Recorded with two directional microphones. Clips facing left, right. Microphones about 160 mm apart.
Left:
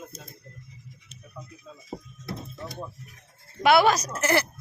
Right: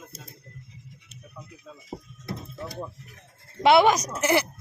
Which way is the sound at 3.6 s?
25° right (ahead or behind).